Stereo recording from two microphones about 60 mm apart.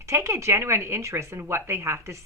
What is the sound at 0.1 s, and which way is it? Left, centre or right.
Speech, right.